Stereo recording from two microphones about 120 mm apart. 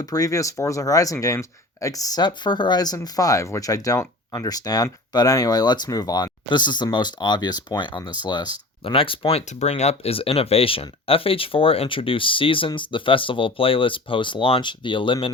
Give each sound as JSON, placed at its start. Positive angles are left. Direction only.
{"t": 0.0, "sound": "speech", "side_deg": 30}
{"t": 9.5, "sound": "speech", "side_deg": 70}